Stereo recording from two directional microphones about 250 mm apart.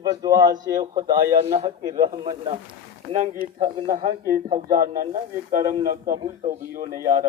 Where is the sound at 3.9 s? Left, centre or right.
Centre.